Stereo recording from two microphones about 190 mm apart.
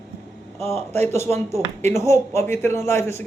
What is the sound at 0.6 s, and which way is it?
Speech, 30° right (ahead or behind).